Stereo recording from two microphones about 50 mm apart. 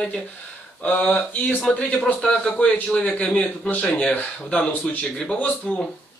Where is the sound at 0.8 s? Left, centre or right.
Left.